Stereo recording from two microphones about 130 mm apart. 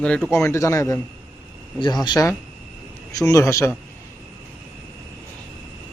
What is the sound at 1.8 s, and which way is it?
A man's voice, 35° left (ahead or behind).